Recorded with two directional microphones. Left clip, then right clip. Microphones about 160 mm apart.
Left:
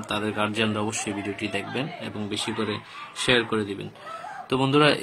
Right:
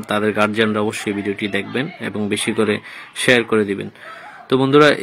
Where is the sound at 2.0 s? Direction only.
35° right (ahead or behind).